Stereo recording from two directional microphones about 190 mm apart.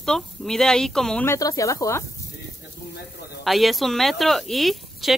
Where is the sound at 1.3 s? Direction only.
20° left (ahead or behind).